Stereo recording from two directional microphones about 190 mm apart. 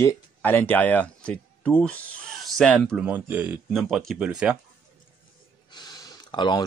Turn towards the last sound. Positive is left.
turn(degrees=25)  # may be behind; listen again after turning